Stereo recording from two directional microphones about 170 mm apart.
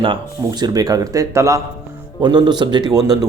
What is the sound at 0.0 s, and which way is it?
Speech, 25° right (ahead or behind).